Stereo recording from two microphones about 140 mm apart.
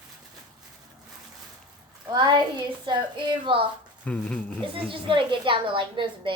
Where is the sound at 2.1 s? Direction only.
30° right (ahead or behind).